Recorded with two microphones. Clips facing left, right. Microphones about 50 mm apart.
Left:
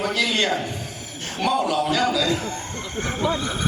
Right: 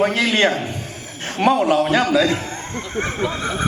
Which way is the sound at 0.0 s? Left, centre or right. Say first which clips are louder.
Right 6 dB; right.